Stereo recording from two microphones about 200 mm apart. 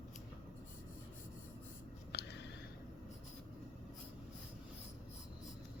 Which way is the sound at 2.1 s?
60° left (ahead or behind).